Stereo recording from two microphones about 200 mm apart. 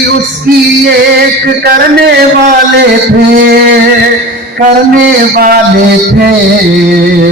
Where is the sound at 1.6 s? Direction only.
50° right (ahead or behind).